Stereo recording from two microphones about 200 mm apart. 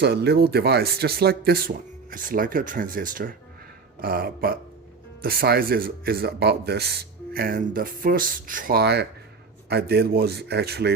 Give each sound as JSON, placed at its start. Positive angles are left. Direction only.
{"t": 0.0, "sound": "speech", "side_deg": -55}